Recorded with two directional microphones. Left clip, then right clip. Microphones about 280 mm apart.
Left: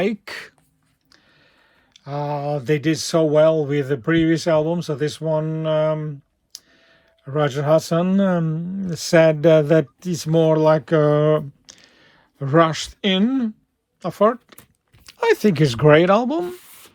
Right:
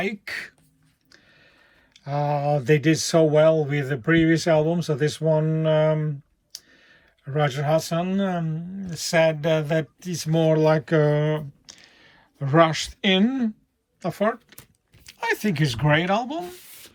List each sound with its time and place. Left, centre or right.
0.0 s speech: centre